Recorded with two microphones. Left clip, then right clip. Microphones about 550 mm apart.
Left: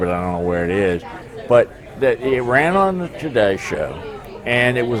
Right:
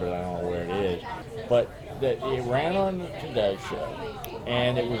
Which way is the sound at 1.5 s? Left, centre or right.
Left.